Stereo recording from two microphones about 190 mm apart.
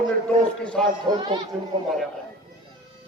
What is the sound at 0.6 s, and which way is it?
Speech, 5° left (ahead or behind).